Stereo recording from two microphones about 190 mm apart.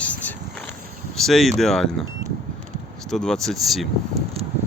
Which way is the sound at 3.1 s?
5° left (ahead or behind).